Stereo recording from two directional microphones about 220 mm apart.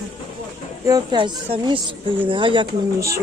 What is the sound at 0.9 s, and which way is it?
A woman's voice, 20° right (ahead or behind).